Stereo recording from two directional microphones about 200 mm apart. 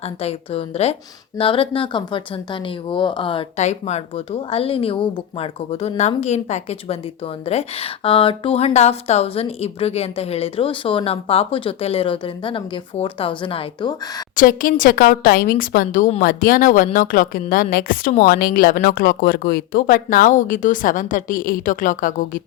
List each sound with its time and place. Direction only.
0.0 s a woman's voice: 30° left (ahead or behind)
14.3 s speech: 45° left (ahead or behind)